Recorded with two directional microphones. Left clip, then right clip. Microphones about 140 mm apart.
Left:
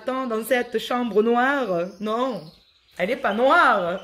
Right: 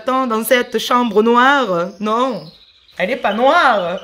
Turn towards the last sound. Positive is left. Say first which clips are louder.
# right 5 dB
turn(degrees=5)  # may be behind; listen again after turning